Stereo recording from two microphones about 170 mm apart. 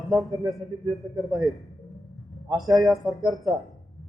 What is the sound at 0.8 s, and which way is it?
Speech, 20° right (ahead or behind).